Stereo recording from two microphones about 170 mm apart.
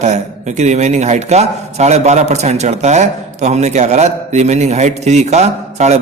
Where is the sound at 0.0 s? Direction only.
40° right (ahead or behind).